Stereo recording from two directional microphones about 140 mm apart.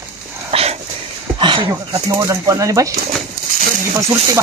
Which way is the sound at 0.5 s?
45° right (ahead or behind).